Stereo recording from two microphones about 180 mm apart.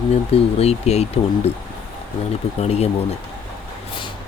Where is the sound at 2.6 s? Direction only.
35° left (ahead or behind).